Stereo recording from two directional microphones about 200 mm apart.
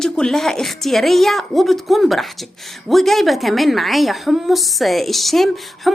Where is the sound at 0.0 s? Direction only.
Centre (ahead or behind).